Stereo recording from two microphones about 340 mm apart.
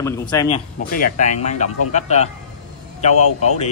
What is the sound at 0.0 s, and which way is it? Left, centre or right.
Speech, centre.